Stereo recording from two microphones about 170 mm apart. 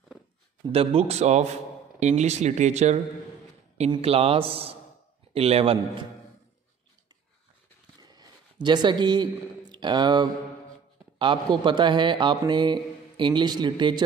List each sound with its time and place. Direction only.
0.7 s a man's voice: 35° right (ahead or behind)
8.0 s a sound: 25° right (ahead or behind)
8.6 s a man's voice: 25° right (ahead or behind)